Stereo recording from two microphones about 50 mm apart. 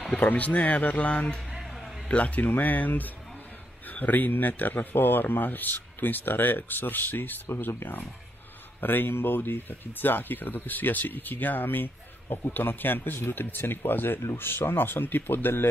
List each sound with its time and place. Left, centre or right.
0.1 s speech: left
1.6 s a sound: centre
2.0 s speech: left